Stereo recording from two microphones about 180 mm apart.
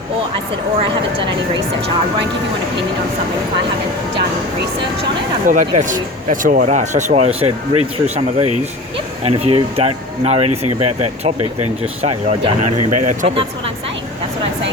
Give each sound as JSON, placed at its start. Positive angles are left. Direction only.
{"t": 5.5, "sound": "speech", "side_deg": -45}
{"t": 12.0, "sound": "speech", "side_deg": -35}